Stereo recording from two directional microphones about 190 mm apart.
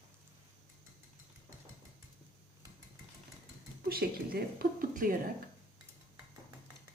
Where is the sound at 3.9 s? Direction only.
55° right (ahead or behind).